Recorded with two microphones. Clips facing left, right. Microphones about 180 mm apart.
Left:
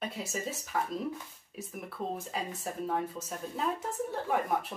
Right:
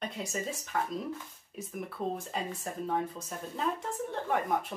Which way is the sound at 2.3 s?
Centre (ahead or behind).